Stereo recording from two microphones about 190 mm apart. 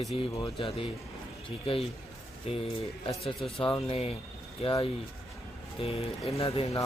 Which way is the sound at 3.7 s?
30° left (ahead or behind).